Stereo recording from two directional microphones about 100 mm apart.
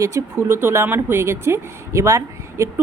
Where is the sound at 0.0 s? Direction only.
30° right (ahead or behind).